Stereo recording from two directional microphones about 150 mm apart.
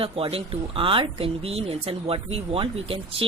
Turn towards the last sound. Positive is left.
turn(degrees=-40)  # may be behind; listen again after turning